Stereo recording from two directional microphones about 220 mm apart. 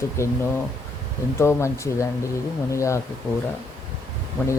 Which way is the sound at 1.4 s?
10° left (ahead or behind).